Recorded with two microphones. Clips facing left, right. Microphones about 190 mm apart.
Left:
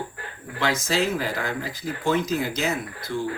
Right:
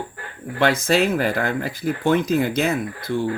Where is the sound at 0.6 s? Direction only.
55° right (ahead or behind).